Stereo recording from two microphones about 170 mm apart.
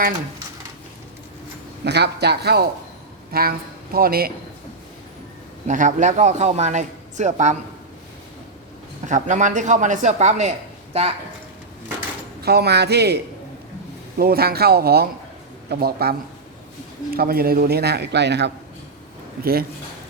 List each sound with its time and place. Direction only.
1.8 s a man's voice: 80° right; by 4.3 s 60° right (ahead or behind)
5.6 s a man's voice: 50° right (ahead or behind)
9.0 s a man's voice: 45° right (ahead or behind)
12.4 s a man's voice: 70° right (ahead or behind)
14.2 s a man's voice: 65° right (ahead or behind); by 18.5 s 85° right
19.4 s speech: 60° right (ahead or behind)